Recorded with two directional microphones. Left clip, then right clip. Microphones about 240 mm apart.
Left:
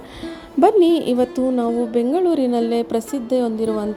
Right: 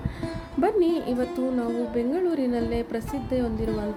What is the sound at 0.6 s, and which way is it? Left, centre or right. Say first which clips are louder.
A woman's voice: left 9 dB; left.